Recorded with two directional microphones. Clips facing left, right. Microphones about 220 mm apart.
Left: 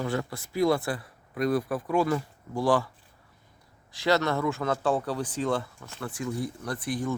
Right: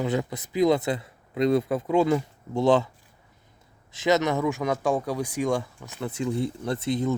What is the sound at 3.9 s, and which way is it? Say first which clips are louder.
Speech: right 3 dB; 20° right (ahead or behind).